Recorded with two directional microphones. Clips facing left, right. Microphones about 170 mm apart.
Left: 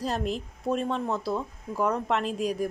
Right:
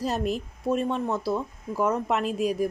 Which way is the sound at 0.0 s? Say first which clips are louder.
Right 2 dB; 5° right (ahead or behind).